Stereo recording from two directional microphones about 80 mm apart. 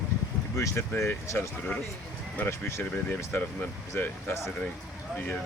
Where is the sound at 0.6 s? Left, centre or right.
Left.